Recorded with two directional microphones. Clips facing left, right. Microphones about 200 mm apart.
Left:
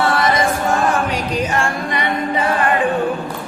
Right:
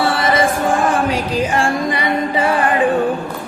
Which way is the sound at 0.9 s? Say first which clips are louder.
Right 2 dB; 30° right (ahead or behind).